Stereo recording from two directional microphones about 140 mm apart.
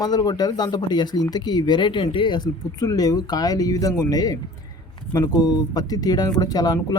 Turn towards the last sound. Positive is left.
turn(degrees=25)  # may be behind; listen again after turning